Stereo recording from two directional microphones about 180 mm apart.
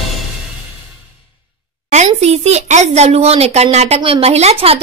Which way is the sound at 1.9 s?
40° right (ahead or behind).